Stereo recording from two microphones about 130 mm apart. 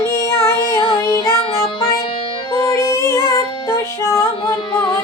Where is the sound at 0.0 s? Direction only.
20° left (ahead or behind).